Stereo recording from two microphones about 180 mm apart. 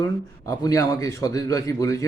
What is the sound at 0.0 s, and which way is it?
Speech, 15° left (ahead or behind).